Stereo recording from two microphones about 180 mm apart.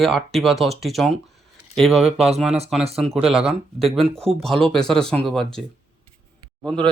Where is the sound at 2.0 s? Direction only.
35° right (ahead or behind).